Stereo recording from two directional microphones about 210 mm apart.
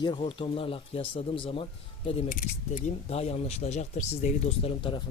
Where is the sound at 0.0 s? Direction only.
25° left (ahead or behind).